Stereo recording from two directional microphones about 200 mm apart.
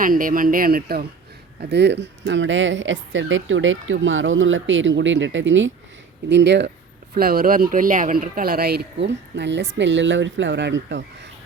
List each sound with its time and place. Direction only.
0.0 s speech: 45° right (ahead or behind)
1.7 s speech: 60° right (ahead or behind)
7.1 s speech: 50° right (ahead or behind)